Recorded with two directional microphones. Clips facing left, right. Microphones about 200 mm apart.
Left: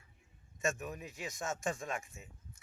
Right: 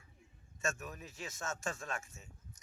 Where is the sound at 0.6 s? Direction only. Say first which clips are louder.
Left 3 dB; 15° left (ahead or behind).